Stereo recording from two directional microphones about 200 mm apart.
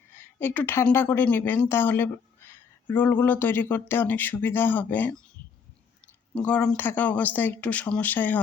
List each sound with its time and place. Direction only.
0.1 s a woman's voice: 10° left (ahead or behind)
6.3 s a woman's voice: 5° left (ahead or behind)